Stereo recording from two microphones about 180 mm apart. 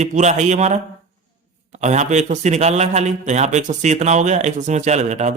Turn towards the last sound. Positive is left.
turn(degrees=-40)  # may be behind; listen again after turning